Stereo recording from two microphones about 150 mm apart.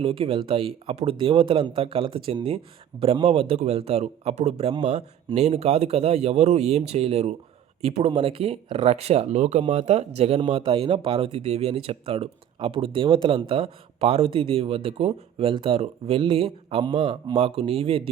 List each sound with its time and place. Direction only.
0.0 s speech: 40° right (ahead or behind)